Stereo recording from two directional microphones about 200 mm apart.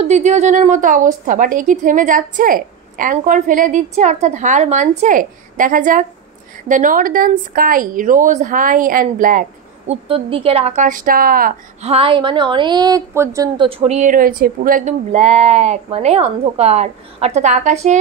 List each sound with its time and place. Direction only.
0.0 s a woman's voice: 35° right (ahead or behind)
10.0 s a woman's voice: 25° right (ahead or behind); by 11.5 s 45° right (ahead or behind)
11.8 s a woman's voice: 30° right (ahead or behind); by 13.5 s 15° right (ahead or behind)
13.6 s a woman's voice: 30° right (ahead or behind)